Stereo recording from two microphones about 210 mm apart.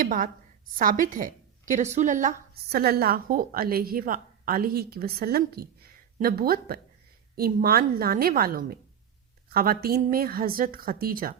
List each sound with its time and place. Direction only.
0.0 s a woman's voice: 40° right (ahead or behind)